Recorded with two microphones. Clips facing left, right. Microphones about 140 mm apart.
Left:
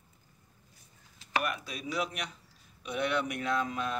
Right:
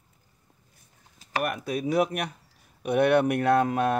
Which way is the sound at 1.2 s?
45° right (ahead or behind).